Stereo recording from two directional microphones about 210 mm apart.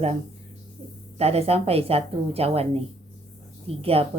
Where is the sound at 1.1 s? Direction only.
30° right (ahead or behind).